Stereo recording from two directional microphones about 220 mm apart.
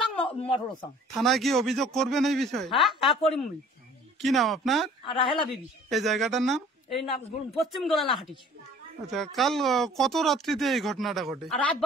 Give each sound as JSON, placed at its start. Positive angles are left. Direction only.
{"t": 0.4, "sound": "speech", "side_deg": 25}
{"t": 1.1, "sound": "speech", "side_deg": 0}